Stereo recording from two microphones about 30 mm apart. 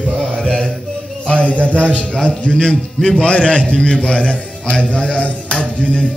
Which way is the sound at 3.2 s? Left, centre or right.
Left.